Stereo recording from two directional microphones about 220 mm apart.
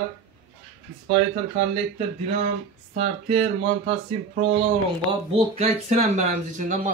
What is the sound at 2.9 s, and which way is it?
Speech, 25° right (ahead or behind).